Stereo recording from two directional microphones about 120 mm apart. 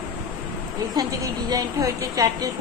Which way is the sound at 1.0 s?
30° right (ahead or behind).